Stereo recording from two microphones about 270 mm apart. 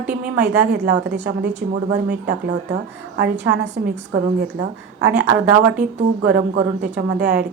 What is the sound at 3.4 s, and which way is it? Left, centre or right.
A woman's voice, right.